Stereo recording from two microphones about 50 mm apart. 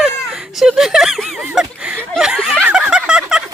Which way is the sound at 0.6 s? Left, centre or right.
Centre.